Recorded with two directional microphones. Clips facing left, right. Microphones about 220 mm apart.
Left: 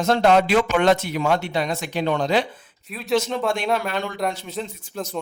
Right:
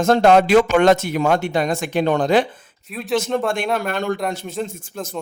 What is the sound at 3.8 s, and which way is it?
A man's voice, 50° right (ahead or behind).